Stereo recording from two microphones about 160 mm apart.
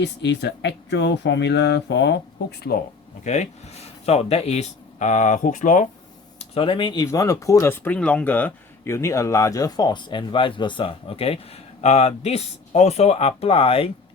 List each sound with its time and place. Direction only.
0.0 s speech: 90° left
3.2 s speech: 45° left (ahead or behind)
6.4 s speech: 35° left (ahead or behind)